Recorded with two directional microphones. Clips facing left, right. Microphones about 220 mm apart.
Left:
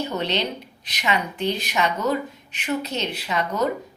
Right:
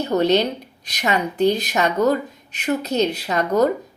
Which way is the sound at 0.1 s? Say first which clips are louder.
Right 8 dB; 40° right (ahead or behind).